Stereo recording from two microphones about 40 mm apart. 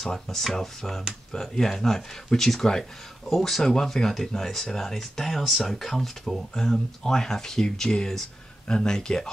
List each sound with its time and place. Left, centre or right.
0.0 s speech: centre